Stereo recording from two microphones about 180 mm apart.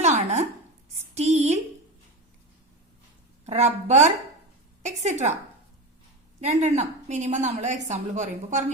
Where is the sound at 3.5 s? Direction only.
40° right (ahead or behind).